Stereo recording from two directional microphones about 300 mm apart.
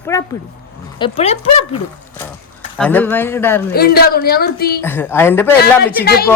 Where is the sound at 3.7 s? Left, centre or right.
Left.